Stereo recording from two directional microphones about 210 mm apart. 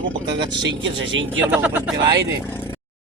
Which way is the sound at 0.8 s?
60° right (ahead or behind).